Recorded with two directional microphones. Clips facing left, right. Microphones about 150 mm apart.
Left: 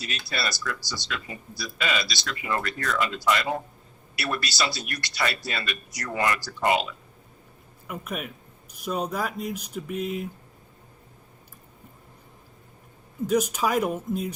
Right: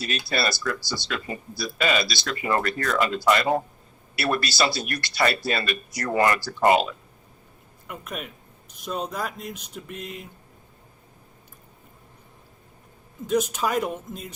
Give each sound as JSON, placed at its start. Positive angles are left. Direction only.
{"t": 0.3, "sound": "speech", "side_deg": -55}
{"t": 0.8, "sound": "speech", "side_deg": -30}
{"t": 1.0, "sound": "speech", "side_deg": -50}
{"t": 7.9, "sound": "speech", "side_deg": 5}
{"t": 13.2, "sound": "speech", "side_deg": 10}